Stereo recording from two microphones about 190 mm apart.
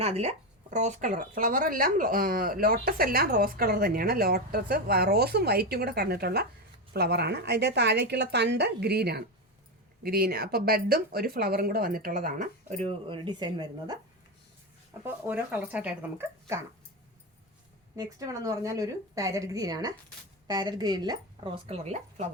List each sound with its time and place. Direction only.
0.0 s a woman's voice: 35° right (ahead or behind)
15.0 s a woman's voice: 10° right (ahead or behind)
17.9 s a woman's voice: 20° right (ahead or behind); by 22.3 s 35° right (ahead or behind)